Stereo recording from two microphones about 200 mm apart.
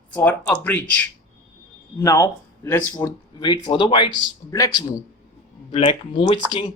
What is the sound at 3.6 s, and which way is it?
Speech, 20° left (ahead or behind).